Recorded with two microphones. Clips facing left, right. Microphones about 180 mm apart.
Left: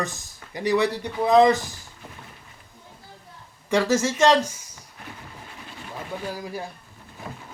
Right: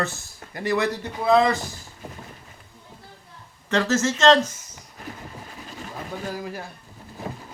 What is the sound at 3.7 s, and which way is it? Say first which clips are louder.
Speech: left 1 dB; 15° left (ahead or behind).